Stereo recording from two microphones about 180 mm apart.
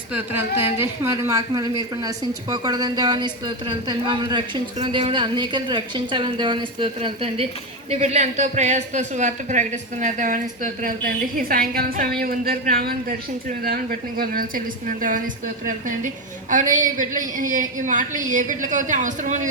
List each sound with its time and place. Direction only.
0.1 s a woman's voice: 10° right (ahead or behind); by 13.1 s 55° right (ahead or behind)
14.2 s a man's voice: 50° right (ahead or behind)
16.5 s a man's voice: 45° right (ahead or behind)